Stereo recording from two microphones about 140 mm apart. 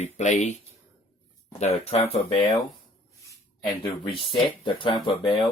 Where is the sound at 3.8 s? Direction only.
40° left (ahead or behind).